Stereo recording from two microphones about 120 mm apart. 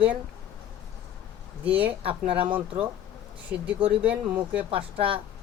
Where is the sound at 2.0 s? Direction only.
50° right (ahead or behind).